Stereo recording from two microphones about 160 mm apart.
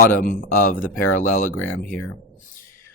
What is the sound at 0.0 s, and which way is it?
Speech, 60° left (ahead or behind).